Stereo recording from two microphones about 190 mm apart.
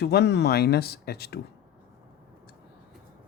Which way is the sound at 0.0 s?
60° left (ahead or behind).